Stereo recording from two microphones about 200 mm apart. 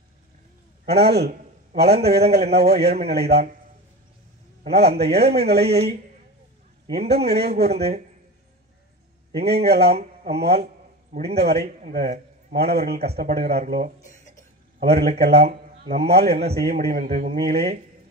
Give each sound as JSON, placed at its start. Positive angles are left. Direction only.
{"t": 0.8, "sound": "a man's voice", "side_deg": -55}
{"t": 4.6, "sound": "a man's voice", "side_deg": -55}
{"t": 6.9, "sound": "a man's voice", "side_deg": -55}
{"t": 9.4, "sound": "a man's voice", "side_deg": -55}
{"t": 17.1, "sound": "speech", "side_deg": -35}
{"t": 17.4, "sound": "a man's voice", "side_deg": -55}